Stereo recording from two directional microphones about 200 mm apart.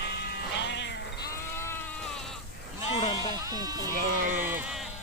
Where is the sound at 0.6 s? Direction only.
60° left (ahead or behind).